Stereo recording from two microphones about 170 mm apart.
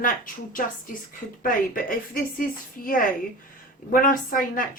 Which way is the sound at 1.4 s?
55° left (ahead or behind).